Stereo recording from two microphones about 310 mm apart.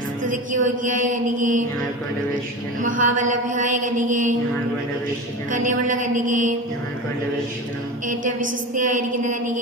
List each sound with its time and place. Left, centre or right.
0.3 s mantra: right
2.8 s mantra: right
5.5 s mantra: right
8.1 s mantra: right